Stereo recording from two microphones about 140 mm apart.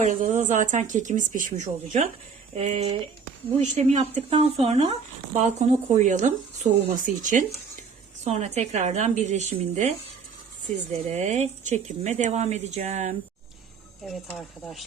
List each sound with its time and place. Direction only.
0.0 s speech: 65° right (ahead or behind)
2.6 s speech: 45° right (ahead or behind)
3.6 s speech: 55° right (ahead or behind)
8.2 s speech: 55° right (ahead or behind)
10.9 s speech: 55° right (ahead or behind)
14.0 s speech: centre (ahead or behind)